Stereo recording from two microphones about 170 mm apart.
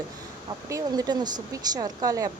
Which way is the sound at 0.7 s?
25° right (ahead or behind).